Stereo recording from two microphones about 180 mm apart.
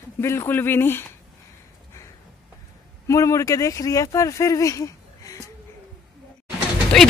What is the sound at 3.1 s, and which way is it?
Speech, 15° left (ahead or behind).